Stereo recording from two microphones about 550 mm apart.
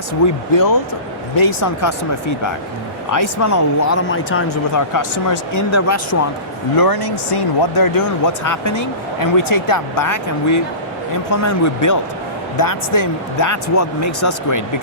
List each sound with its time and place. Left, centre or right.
0.2 s speech: left
3.1 s speech: left
4.9 s speech: left